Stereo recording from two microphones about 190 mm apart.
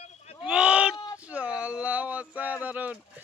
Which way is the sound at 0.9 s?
15° left (ahead or behind).